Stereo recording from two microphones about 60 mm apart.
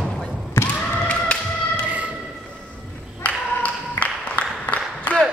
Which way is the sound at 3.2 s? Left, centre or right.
Left.